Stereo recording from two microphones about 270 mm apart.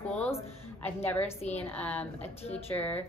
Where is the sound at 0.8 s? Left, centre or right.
Centre.